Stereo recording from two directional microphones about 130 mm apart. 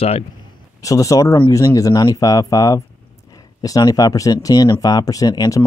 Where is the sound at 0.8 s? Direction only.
25° left (ahead or behind).